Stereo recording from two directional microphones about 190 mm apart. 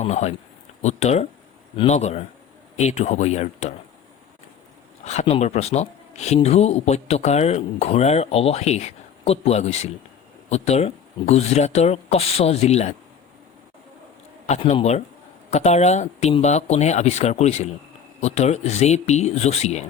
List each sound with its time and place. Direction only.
0.0 s speech: 35° left (ahead or behind)
5.0 s speech: 35° left (ahead or behind)
14.4 s speech: 35° left (ahead or behind)